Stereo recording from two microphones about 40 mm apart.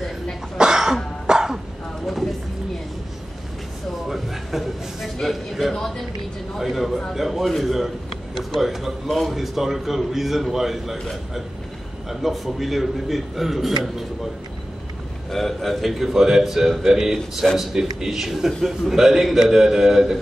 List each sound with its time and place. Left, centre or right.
0.6 s cough: centre
1.2 s throat clearing: centre
4.1 s a sound: centre
6.6 s a man's voice: centre
7.6 s a sound: centre
8.5 s a man's voice: centre
12.1 s a man's voice: centre
15.3 s a man's voice: centre